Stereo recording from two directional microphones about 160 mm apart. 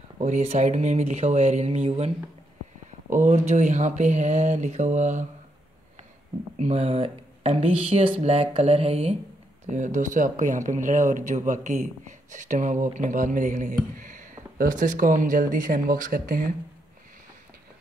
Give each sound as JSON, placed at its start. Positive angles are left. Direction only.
{"t": 0.2, "sound": "speech", "side_deg": -45}
{"t": 6.6, "sound": "speech", "side_deg": -40}
{"t": 9.7, "sound": "speech", "side_deg": -50}